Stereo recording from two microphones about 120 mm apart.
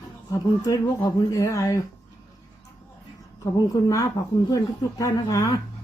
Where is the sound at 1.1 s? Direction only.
30° left (ahead or behind).